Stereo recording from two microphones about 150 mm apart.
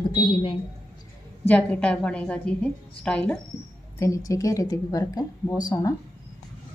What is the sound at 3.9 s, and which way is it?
Speech, 20° left (ahead or behind).